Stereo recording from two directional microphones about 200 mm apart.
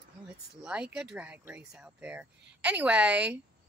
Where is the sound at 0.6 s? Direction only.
5° right (ahead or behind).